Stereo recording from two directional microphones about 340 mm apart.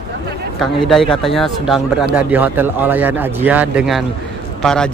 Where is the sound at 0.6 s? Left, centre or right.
Centre.